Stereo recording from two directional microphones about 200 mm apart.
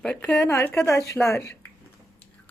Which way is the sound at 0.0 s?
5° left (ahead or behind).